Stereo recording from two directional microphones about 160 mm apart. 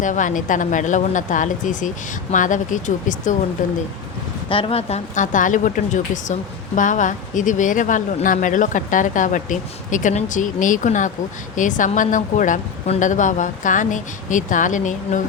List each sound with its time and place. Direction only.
0.0 s speech: 50° left (ahead or behind)
4.4 s speech: 35° left (ahead or behind); by 15.2 s 50° left (ahead or behind)